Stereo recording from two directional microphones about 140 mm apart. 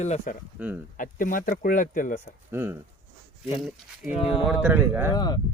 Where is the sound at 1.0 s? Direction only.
75° left (ahead or behind).